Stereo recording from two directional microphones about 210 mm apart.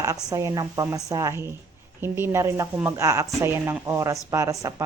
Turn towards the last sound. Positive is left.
turn(degrees=-15)  # may be behind; listen again after turning